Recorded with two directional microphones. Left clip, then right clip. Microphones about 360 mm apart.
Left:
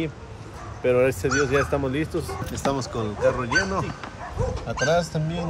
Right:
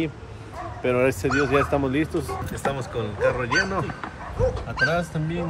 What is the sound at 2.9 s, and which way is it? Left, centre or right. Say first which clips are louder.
Speech: right 1 dB; centre.